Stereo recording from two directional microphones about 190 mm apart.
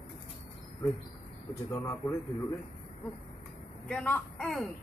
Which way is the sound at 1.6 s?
15° left (ahead or behind).